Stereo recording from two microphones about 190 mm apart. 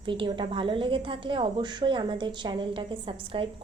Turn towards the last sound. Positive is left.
turn(degrees=-30)  # may be behind; listen again after turning